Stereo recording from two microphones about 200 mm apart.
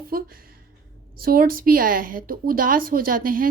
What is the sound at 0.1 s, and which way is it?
A woman's voice, 50° right (ahead or behind).